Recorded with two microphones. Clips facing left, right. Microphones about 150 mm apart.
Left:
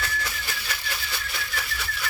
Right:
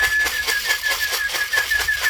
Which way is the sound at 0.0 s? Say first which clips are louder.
Right 4 dB; 90° right.